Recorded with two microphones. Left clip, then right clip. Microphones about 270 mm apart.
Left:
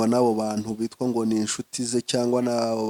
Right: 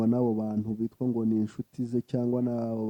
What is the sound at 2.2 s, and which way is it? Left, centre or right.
Speech, centre.